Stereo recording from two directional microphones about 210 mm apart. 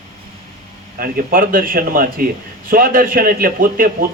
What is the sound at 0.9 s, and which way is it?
A man's voice, 45° right (ahead or behind).